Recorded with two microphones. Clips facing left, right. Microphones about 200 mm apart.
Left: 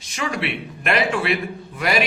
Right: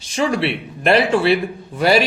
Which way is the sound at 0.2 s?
30° right (ahead or behind).